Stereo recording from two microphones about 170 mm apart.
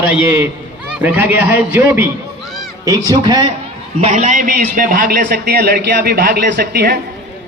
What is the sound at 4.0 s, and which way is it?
A man's voice, 45° right (ahead or behind).